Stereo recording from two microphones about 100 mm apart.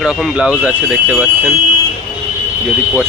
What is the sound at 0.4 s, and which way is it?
Speech, 15° right (ahead or behind).